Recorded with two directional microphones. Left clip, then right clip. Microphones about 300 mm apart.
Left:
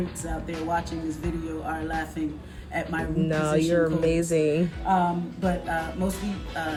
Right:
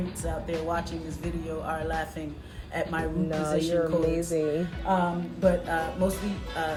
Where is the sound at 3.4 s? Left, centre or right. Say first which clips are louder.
Left 3 dB; left.